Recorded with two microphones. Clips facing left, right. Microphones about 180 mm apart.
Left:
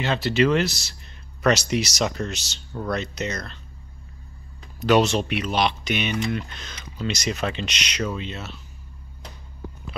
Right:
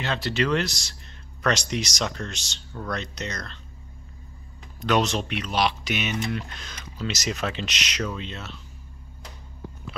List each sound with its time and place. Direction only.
0.0 s speech: centre (ahead or behind)
4.7 s speech: 5° left (ahead or behind)